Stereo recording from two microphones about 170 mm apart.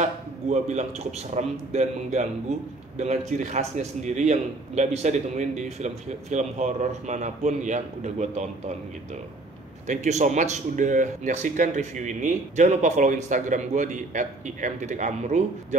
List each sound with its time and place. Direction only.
0.0 s a man's voice: 40° right (ahead or behind)
9.8 s a man's voice: 45° right (ahead or behind)